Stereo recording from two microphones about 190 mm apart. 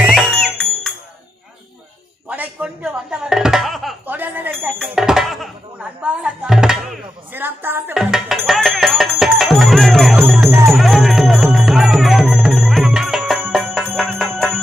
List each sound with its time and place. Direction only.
0.0 s music: centre (ahead or behind)
2.3 s music: 10° right (ahead or behind)